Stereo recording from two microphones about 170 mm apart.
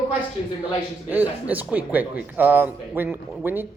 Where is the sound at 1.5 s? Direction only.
10° right (ahead or behind).